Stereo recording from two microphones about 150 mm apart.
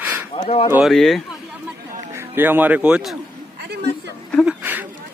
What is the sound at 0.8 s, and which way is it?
Speech, centre (ahead or behind).